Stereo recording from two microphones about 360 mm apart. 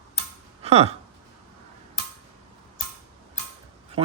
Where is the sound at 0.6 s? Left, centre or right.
Centre.